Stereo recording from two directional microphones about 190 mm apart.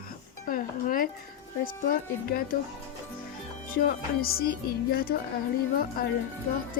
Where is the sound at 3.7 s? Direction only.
50° left (ahead or behind).